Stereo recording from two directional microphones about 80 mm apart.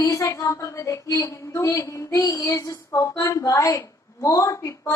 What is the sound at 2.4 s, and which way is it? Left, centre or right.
A woman's voice, left.